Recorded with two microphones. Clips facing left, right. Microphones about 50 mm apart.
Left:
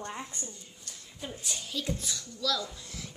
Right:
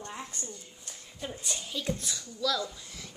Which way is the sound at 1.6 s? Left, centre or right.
Centre.